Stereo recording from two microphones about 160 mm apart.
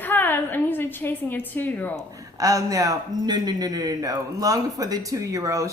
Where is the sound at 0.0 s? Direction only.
10° left (ahead or behind).